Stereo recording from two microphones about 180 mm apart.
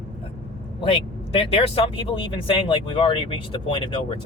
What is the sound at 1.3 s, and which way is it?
Speech, 30° left (ahead or behind).